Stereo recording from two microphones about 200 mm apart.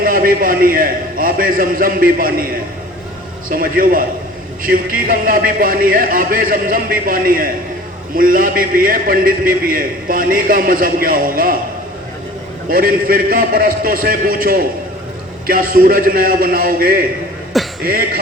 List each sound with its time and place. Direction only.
0.0 s a man's voice: 45° right (ahead or behind)
12.6 s a man's voice: 45° right (ahead or behind)